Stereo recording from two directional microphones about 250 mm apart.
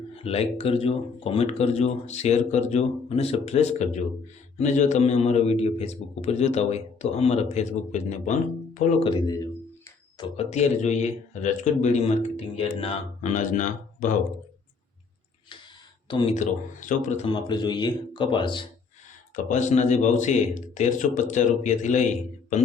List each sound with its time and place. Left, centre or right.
0.2 s speech: left
16.0 s speech: centre
16.3 s speech: left
19.4 s speech: left